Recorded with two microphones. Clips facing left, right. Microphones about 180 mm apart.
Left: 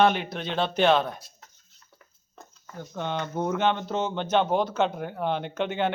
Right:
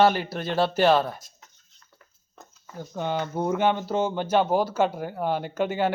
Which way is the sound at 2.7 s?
10° right (ahead or behind).